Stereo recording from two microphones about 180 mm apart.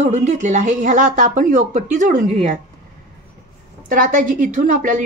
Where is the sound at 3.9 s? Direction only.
45° right (ahead or behind).